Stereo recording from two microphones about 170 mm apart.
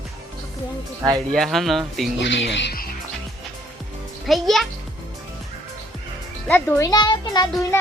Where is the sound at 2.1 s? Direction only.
90° left; by 2.9 s 70° left (ahead or behind).